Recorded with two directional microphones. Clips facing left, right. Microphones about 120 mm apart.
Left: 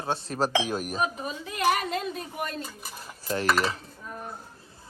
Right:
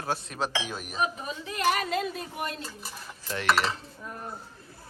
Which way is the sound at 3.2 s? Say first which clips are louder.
Left 6 dB; 35° left (ahead or behind).